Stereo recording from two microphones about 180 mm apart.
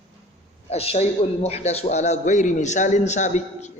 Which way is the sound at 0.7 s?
35° left (ahead or behind).